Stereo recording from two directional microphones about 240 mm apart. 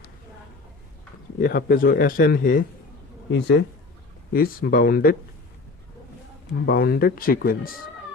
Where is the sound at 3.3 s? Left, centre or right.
Left.